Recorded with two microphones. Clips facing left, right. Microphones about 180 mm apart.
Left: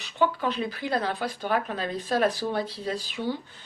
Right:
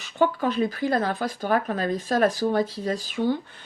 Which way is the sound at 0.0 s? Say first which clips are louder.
Right 3 dB; 45° right (ahead or behind).